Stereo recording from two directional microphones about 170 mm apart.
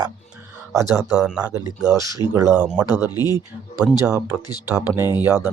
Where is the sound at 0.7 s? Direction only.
20° right (ahead or behind).